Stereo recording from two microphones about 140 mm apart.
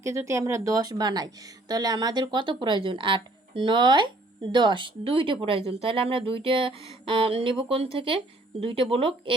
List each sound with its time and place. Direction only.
0.0 s a woman's voice: 20° right (ahead or behind); by 9.3 s 40° right (ahead or behind)